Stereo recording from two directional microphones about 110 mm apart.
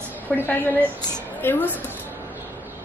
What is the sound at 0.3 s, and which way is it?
A woman's voice, 10° left (ahead or behind).